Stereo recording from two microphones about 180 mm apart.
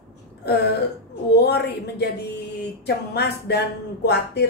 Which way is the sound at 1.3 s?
65° left (ahead or behind).